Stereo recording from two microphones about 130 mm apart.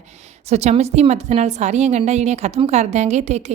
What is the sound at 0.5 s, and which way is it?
A woman's voice, 55° right (ahead or behind).